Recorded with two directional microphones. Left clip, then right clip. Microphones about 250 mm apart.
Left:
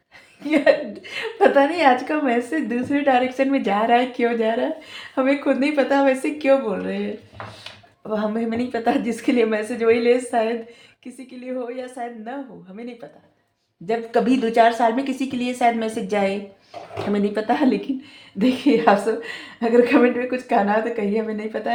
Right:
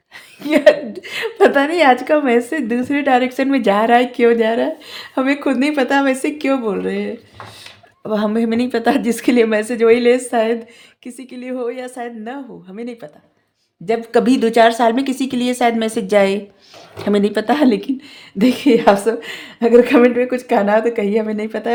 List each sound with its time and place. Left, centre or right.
0.4 s a woman's voice: right
8.0 s a woman's voice: right